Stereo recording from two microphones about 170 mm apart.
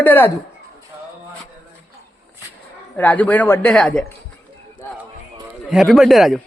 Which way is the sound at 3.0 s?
10° left (ahead or behind).